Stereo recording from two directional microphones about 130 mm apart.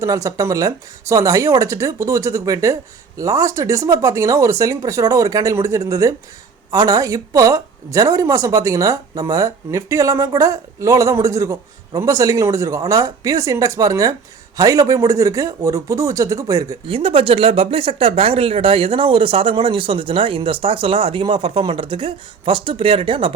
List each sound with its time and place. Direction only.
0.0 s speech: 25° right (ahead or behind)
16.9 s speech: 45° right (ahead or behind)